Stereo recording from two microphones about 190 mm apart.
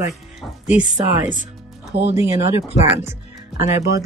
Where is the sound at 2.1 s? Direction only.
15° right (ahead or behind).